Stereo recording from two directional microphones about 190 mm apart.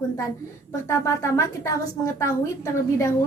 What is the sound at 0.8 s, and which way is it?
A woman's voice, 15° left (ahead or behind).